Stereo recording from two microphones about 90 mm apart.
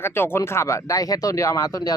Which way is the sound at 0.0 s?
25° left (ahead or behind).